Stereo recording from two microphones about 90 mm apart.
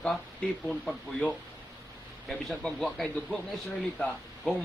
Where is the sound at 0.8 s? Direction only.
15° left (ahead or behind).